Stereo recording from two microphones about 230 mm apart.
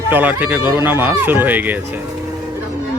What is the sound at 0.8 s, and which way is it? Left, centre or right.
Speech, centre.